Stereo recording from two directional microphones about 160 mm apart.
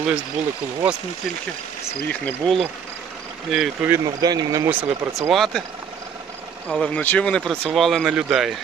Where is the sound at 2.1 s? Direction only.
10° left (ahead or behind).